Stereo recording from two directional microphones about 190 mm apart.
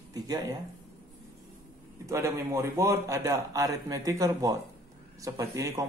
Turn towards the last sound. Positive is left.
turn(degrees=-15)  # may be behind; listen again after turning